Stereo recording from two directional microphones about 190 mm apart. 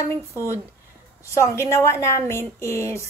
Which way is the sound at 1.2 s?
15° left (ahead or behind).